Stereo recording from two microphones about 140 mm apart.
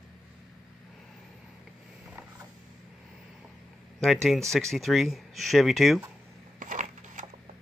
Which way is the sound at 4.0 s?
Centre (ahead or behind).